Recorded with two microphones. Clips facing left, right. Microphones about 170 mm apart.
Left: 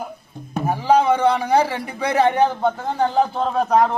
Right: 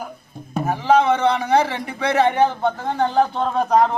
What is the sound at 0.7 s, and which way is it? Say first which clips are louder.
A man's voice: even; 10° left (ahead or behind).